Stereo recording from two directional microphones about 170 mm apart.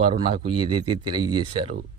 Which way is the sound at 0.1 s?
30° right (ahead or behind).